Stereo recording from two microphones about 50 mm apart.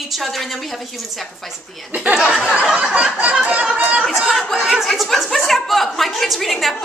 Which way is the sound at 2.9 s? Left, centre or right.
Right.